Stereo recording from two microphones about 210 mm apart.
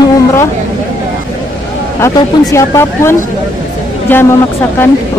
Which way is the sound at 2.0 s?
15° left (ahead or behind).